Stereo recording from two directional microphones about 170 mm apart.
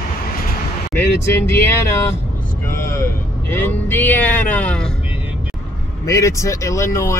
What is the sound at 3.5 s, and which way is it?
Speech, 15° left (ahead or behind).